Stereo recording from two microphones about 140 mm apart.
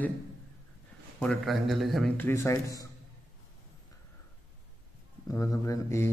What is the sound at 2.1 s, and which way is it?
Speech, 15° left (ahead or behind).